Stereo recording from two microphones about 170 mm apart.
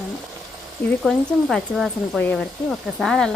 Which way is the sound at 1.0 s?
Centre (ahead or behind).